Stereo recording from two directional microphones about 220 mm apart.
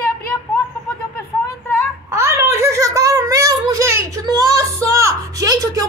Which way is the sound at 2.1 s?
10° right (ahead or behind).